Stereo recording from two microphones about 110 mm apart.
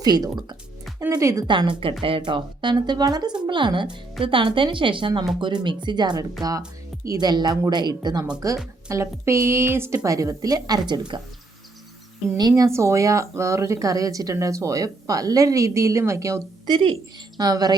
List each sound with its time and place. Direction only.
0.0 s speech: 35° right (ahead or behind)
1.5 s a woman's voice: 45° right (ahead or behind)
8.4 s speech: 30° right (ahead or behind)
12.4 s speech: 35° right (ahead or behind)